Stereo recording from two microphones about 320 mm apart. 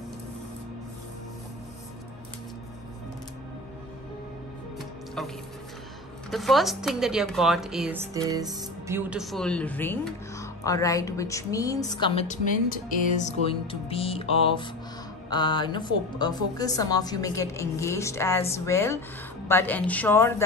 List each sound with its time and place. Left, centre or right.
4.7 s music: centre
6.3 s a woman's voice: centre